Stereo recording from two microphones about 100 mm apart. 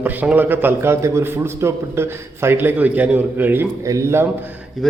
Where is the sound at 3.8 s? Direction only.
30° right (ahead or behind).